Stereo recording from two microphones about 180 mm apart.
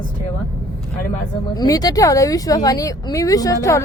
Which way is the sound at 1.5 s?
20° left (ahead or behind).